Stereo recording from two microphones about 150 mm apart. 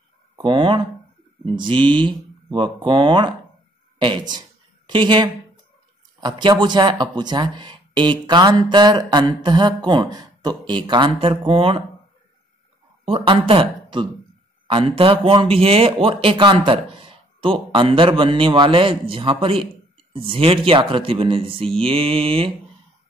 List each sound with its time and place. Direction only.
0.4 s speech: 30° right (ahead or behind)
13.0 s speech: 40° right (ahead or behind)